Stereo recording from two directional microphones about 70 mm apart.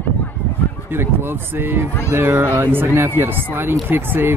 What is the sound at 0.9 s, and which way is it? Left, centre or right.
Speech, right.